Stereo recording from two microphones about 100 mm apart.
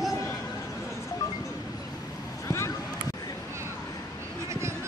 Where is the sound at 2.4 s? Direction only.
25° left (ahead or behind).